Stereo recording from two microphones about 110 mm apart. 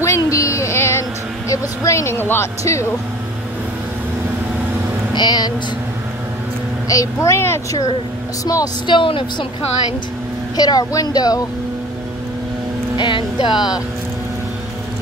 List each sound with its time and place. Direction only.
0.0 s a sound: 30° left (ahead or behind)
1.5 s speech: 30° left (ahead or behind)
5.1 s speech: 40° left (ahead or behind)
6.9 s speech: 30° left (ahead or behind)
8.8 s speech: 50° left (ahead or behind)
10.5 s speech: 35° left (ahead or behind)
12.9 s speech: 45° left (ahead or behind)